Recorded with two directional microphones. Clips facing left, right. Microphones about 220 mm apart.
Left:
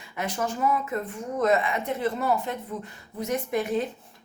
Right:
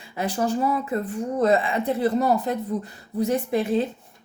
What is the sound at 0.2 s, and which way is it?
Speech, 35° right (ahead or behind).